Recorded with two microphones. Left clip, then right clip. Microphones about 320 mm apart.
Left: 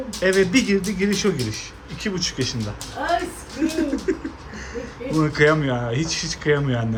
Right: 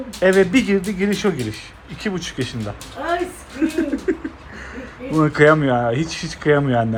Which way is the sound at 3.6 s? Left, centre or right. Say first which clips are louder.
Right 2 dB; centre.